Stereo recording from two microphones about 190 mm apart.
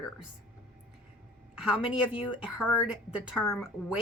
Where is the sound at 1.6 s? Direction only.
5° right (ahead or behind).